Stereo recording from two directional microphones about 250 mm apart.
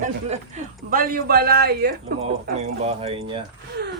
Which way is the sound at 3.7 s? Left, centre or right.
Right.